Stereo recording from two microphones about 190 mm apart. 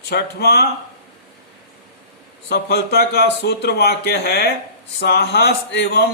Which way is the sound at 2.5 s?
55° left (ahead or behind).